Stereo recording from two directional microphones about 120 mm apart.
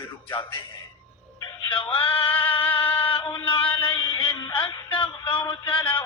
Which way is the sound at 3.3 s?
35° left (ahead or behind).